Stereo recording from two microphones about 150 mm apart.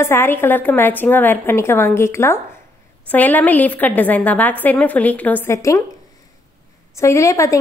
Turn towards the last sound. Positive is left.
turn(degrees=20)  # may be behind; listen again after turning